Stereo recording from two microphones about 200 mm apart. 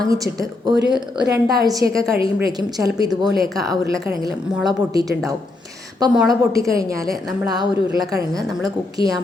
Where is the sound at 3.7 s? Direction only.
15° right (ahead or behind).